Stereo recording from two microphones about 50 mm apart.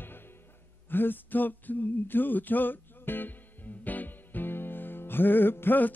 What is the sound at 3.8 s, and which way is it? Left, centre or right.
Music, left.